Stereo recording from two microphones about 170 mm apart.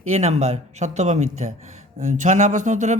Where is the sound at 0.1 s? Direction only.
40° right (ahead or behind).